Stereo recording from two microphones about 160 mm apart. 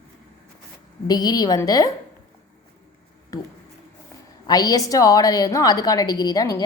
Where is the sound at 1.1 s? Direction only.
25° left (ahead or behind).